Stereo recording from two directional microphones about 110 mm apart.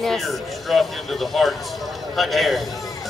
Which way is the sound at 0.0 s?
Centre (ahead or behind).